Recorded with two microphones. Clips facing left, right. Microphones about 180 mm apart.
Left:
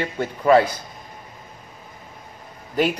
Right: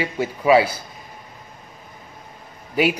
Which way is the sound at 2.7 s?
10° right (ahead or behind).